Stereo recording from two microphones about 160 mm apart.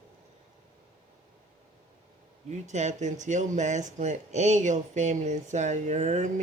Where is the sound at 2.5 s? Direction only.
45° right (ahead or behind).